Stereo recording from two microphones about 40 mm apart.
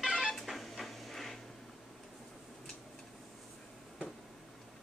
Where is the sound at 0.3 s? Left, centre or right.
Centre.